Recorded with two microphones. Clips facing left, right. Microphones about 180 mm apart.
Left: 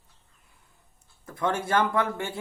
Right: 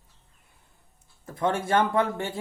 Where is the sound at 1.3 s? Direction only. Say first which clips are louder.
Right 2 dB; 30° right (ahead or behind).